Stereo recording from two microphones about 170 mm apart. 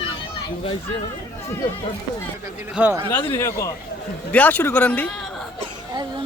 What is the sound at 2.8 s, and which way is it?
Speech, 10° right (ahead or behind).